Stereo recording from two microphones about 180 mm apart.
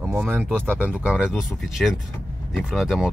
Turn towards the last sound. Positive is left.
turn(degrees=0)  # may be behind; listen again after turning